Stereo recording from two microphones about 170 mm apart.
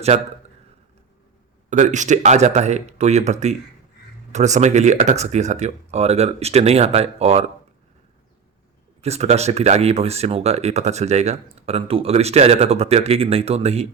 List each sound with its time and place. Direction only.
0.1 s speech: 40° right (ahead or behind)
1.7 s speech: 45° right (ahead or behind)
9.0 s speech: 40° right (ahead or behind)